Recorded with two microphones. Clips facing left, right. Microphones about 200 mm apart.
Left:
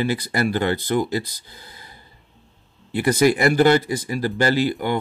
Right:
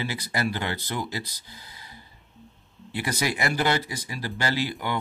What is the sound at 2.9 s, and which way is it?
Speech, 50° left (ahead or behind).